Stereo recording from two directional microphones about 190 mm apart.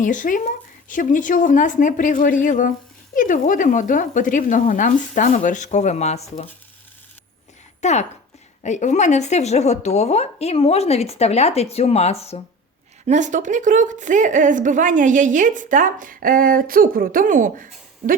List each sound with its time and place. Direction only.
0.0 s speech: 45° left (ahead or behind)
7.8 s speech: 35° left (ahead or behind)
13.1 s a woman's voice: 40° right (ahead or behind)